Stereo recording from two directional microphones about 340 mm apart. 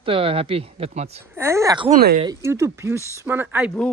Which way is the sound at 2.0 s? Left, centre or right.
Right.